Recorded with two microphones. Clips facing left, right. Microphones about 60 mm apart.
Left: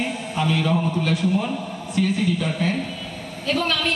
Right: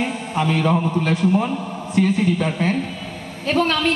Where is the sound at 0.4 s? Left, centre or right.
Right.